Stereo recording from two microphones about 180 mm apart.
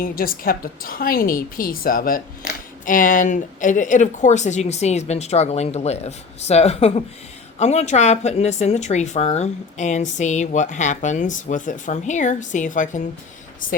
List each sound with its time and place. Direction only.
0.0 s a woman's voice: 55° left (ahead or behind)